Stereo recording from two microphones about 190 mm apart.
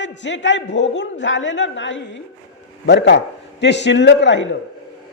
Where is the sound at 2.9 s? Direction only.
65° left (ahead or behind).